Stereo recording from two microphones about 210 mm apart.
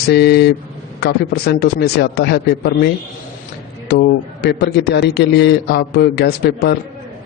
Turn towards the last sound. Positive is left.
turn(degrees=50)  # may be behind; listen again after turning